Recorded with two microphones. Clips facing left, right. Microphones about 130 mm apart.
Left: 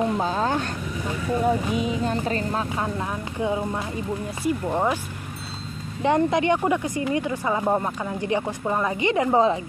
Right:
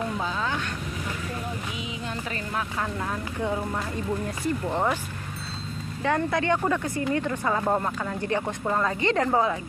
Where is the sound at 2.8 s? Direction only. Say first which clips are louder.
Left 2 dB; 15° left (ahead or behind).